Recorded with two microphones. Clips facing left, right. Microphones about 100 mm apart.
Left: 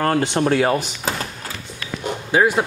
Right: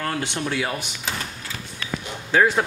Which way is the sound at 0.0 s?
40° left (ahead or behind).